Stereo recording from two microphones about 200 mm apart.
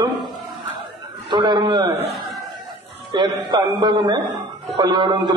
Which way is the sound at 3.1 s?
20° right (ahead or behind).